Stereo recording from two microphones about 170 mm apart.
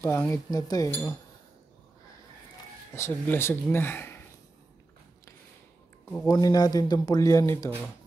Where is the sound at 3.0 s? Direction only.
10° left (ahead or behind).